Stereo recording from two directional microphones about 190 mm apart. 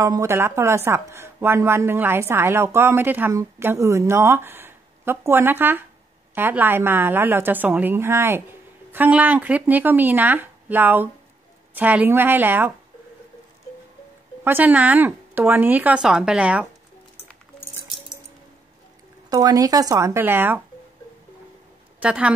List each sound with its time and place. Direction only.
0.0 s speech: 15° right (ahead or behind)
14.4 s speech: 10° right (ahead or behind)
19.2 s speech: 20° right (ahead or behind)
22.0 s speech: 5° right (ahead or behind)